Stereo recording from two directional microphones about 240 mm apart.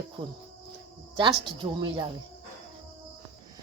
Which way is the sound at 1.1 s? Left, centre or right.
Right.